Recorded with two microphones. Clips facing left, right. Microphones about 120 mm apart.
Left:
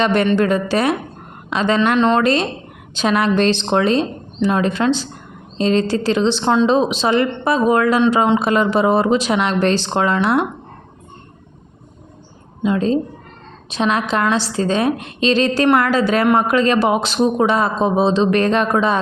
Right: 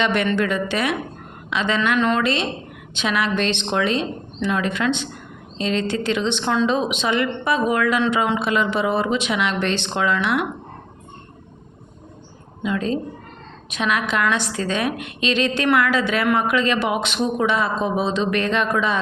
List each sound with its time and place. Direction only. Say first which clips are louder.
0.0 s speech: left 5 dB; 35° left (ahead or behind)
2.0 s speech: left 4 dB; 25° left (ahead or behind)
2.2 s speech: left 5 dB; 40° left (ahead or behind)
12.6 s speech: left 6 dB; 30° left (ahead or behind)